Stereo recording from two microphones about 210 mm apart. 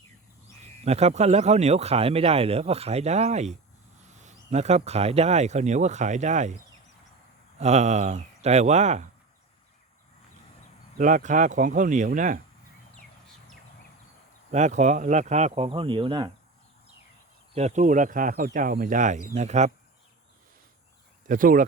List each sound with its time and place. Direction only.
0.9 s speech: 30° right (ahead or behind)
7.6 s speech: 30° right (ahead or behind)
10.9 s speech: 40° right (ahead or behind)
14.5 s speech: 35° right (ahead or behind)
17.5 s speech: 35° right (ahead or behind)
21.2 s speech: 40° right (ahead or behind)